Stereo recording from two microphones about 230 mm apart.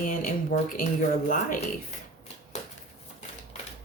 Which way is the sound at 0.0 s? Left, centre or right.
Left.